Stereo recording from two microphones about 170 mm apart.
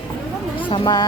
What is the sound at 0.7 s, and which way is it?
Speech, 25° left (ahead or behind).